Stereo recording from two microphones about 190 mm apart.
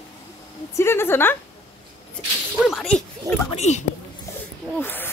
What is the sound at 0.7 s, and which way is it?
Speech, 15° left (ahead or behind).